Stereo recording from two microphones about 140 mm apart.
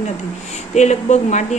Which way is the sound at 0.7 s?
55° left (ahead or behind).